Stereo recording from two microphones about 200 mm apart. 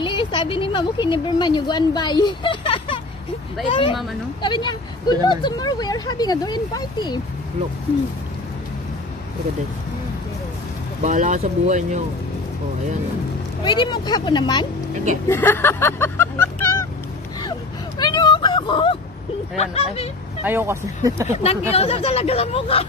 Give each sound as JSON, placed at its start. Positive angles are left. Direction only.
{"t": 0.0, "sound": "speech", "side_deg": 25}
{"t": 11.0, "sound": "speech", "side_deg": -40}
{"t": 13.7, "sound": "speech", "side_deg": 20}
{"t": 15.2, "sound": "speech", "side_deg": 10}
{"t": 17.4, "sound": "vehicle", "side_deg": 20}
{"t": 19.5, "sound": "speech", "side_deg": 30}
{"t": 20.4, "sound": "speech", "side_deg": -15}
{"t": 21.3, "sound": "speech", "side_deg": 30}